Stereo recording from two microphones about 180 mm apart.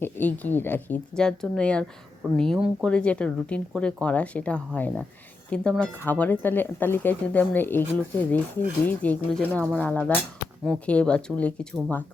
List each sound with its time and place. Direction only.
0.0 s speech: 10° left (ahead or behind)